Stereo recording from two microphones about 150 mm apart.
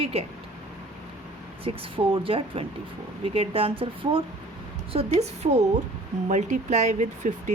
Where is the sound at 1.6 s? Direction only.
35° right (ahead or behind).